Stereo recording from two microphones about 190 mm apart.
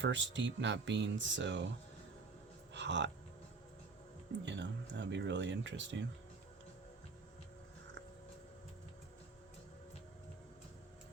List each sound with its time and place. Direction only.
0.0 s speech: 75° right (ahead or behind)
2.7 s speech: 70° right (ahead or behind)
4.4 s speech: 70° right (ahead or behind)